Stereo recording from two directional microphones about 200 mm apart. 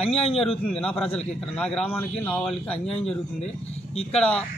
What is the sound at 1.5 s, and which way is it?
A man's voice, 5° left (ahead or behind).